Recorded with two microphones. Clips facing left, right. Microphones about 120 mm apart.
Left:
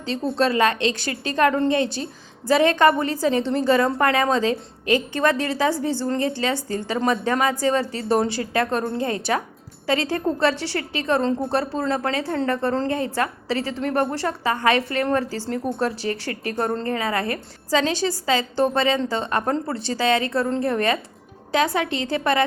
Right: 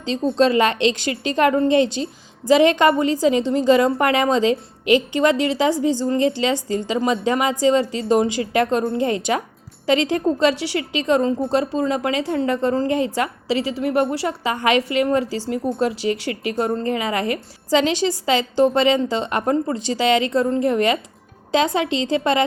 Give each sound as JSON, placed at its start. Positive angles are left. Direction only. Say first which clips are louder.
{"t": 0.3, "sound": "a woman's voice", "louder": "right 3 dB", "side_deg": -20}